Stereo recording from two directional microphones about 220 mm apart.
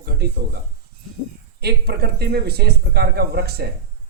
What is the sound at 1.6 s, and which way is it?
A man's voice, 45° right (ahead or behind).